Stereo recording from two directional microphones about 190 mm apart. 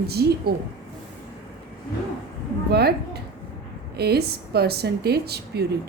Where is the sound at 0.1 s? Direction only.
55° right (ahead or behind).